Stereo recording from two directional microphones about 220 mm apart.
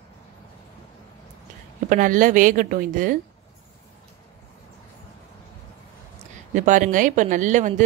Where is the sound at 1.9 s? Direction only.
35° right (ahead or behind).